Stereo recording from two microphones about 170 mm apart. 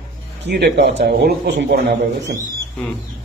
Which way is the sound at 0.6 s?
80° right.